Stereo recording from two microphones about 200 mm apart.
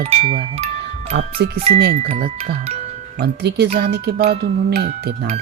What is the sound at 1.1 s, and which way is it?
Speech, 55° right (ahead or behind).